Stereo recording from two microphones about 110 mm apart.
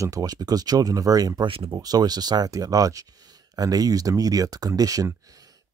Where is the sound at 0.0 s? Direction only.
30° right (ahead or behind).